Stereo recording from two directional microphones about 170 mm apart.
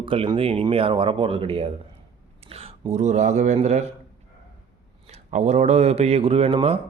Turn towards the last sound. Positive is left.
turn(degrees=-35)  # may be behind; listen again after turning